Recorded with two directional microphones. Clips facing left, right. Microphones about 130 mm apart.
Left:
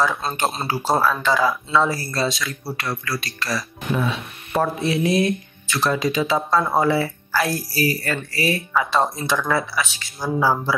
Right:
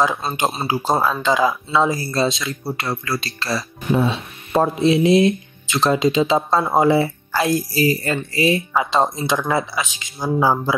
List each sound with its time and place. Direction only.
0.4 s speech: 10° right (ahead or behind)